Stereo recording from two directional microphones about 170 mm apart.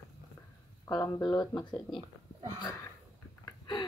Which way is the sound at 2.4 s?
25° right (ahead or behind).